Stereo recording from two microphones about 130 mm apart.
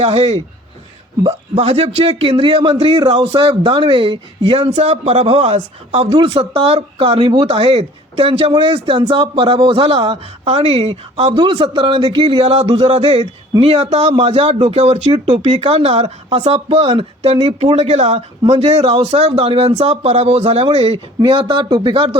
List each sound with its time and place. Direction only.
0.0 s speech: 50° right (ahead or behind)
6.1 s speech: 40° right (ahead or behind)
11.3 s speech: 40° right (ahead or behind)
12.6 s speech: 35° right (ahead or behind)